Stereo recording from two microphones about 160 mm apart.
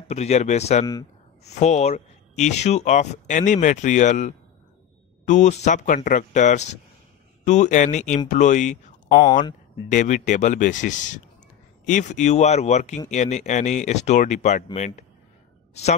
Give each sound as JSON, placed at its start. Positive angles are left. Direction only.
{"t": 0.1, "sound": "speech", "side_deg": 45}